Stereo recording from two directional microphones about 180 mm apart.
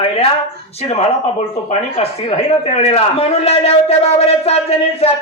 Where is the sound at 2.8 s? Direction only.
35° left (ahead or behind).